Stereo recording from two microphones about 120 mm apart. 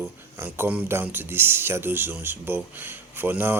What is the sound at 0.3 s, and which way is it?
Speech, 20° right (ahead or behind).